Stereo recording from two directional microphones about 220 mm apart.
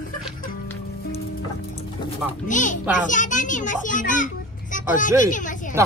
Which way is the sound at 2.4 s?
35° left (ahead or behind).